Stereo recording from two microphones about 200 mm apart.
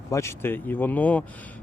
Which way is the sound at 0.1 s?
15° left (ahead or behind).